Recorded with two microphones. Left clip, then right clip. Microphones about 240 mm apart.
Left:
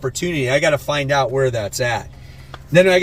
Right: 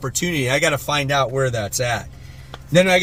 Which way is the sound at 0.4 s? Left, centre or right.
Right.